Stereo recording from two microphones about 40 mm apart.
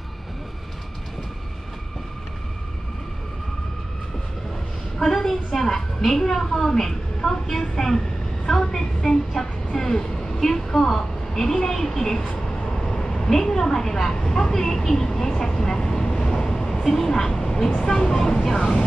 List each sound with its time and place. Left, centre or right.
4.9 s a woman's voice: centre
12.4 s vehicle: centre
13.3 s a woman's voice: centre
14.1 s speech: left
14.4 s a woman's voice: centre